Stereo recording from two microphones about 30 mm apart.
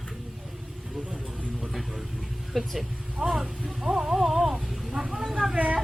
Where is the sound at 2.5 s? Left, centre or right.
Centre.